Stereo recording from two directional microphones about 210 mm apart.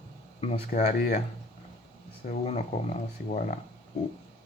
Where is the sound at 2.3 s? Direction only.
30° left (ahead or behind).